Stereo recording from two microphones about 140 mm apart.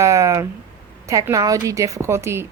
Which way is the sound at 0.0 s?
20° right (ahead or behind).